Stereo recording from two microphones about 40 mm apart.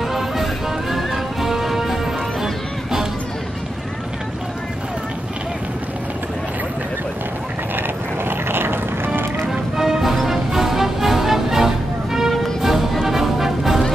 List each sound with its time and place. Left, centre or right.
0.1 s music: centre
8.3 s music: right
9.5 s music: centre